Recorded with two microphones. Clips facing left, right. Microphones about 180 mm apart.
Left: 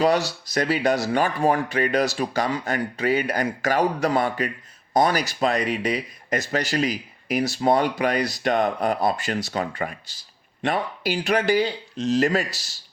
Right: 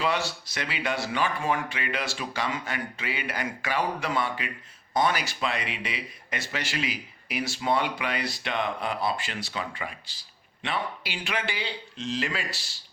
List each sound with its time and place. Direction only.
0.0 s speech: 40° left (ahead or behind)